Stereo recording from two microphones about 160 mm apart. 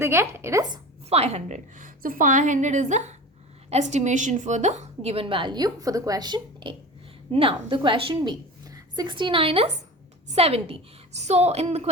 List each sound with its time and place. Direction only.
0.0 s speech: 15° right (ahead or behind)
1.1 s a woman's voice: 40° right (ahead or behind)